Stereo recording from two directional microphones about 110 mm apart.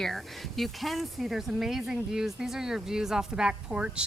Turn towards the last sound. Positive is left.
turn(degrees=-10)  # may be behind; listen again after turning